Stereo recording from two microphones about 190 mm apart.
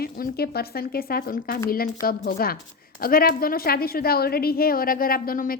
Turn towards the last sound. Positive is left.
turn(degrees=50)  # may be behind; listen again after turning